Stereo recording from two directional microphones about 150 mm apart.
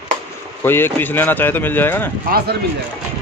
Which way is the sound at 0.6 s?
15° left (ahead or behind).